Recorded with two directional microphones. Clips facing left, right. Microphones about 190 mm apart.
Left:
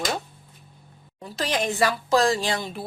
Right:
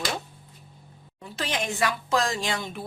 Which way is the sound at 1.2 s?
35° left (ahead or behind).